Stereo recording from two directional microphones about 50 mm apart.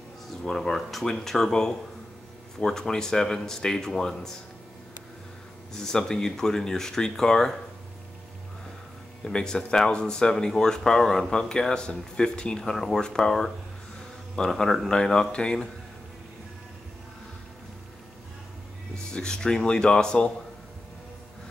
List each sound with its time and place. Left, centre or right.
0.3 s speech: centre
5.7 s speech: centre
9.2 s speech: centre
19.1 s speech: centre